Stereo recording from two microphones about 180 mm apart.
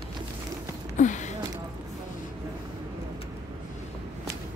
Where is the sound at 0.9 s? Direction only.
40° left (ahead or behind).